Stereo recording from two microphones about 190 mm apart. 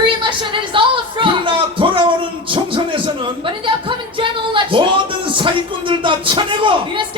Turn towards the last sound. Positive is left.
turn(degrees=-25)  # may be behind; listen again after turning